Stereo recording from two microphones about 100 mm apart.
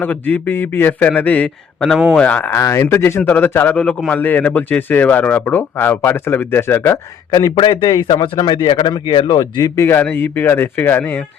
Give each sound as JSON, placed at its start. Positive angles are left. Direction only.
{"t": 0.0, "sound": "a man's voice", "side_deg": 15}
{"t": 2.5, "sound": "a man's voice", "side_deg": 30}
{"t": 7.3, "sound": "a man's voice", "side_deg": 45}
{"t": 9.8, "sound": "a man's voice", "side_deg": 20}